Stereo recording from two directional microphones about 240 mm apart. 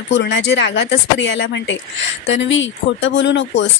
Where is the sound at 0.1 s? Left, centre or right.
Left.